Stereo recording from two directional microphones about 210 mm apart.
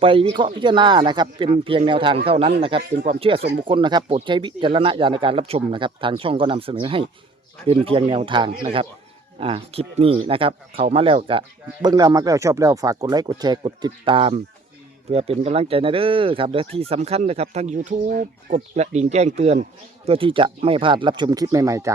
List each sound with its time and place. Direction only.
0.0 s speech: 25° right (ahead or behind)